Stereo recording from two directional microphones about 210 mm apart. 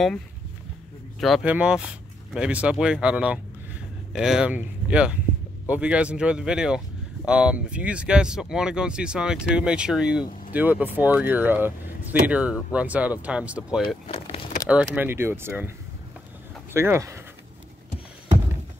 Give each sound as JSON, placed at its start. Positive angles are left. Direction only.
{"t": 1.2, "sound": "speech", "side_deg": -5}
{"t": 13.8, "sound": "vehicle", "side_deg": 25}
{"t": 14.7, "sound": "speech", "side_deg": -5}
{"t": 16.7, "sound": "speech", "side_deg": -10}